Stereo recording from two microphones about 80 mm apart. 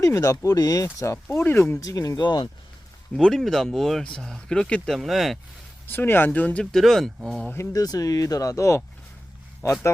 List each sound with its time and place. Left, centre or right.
0.0 s speech: left
0.9 s speech: left
1.8 s speech: left
2.2 s speech: left
3.2 s speech: centre
4.9 s speech: centre
5.9 s speech: left
6.7 s speech: centre
7.7 s speech: left